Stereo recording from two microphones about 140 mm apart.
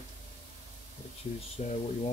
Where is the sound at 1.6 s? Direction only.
50° left (ahead or behind).